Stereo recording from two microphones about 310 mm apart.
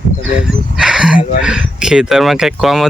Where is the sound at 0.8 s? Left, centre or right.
Centre.